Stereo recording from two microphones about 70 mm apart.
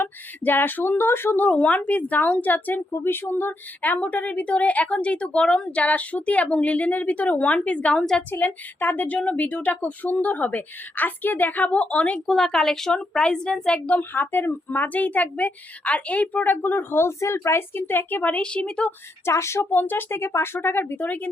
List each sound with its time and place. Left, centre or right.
0.0 s speech: left
12.3 s speech: centre
19.2 s a woman's voice: left
19.7 s a woman's voice: left